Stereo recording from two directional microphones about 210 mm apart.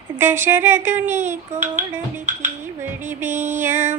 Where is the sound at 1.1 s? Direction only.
35° right (ahead or behind).